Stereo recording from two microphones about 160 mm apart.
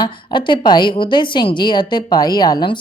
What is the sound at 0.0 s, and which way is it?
A woman's voice, 30° left (ahead or behind).